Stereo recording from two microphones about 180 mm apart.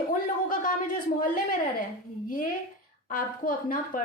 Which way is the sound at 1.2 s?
50° left (ahead or behind).